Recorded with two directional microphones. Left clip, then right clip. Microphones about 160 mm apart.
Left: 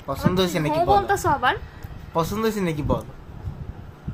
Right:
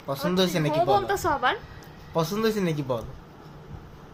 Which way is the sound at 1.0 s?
25° left (ahead or behind).